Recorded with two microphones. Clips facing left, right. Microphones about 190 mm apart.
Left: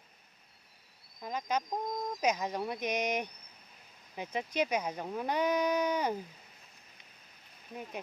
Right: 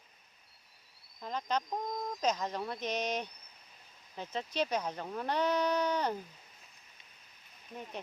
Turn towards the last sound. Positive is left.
turn(degrees=10)  # may be behind; listen again after turning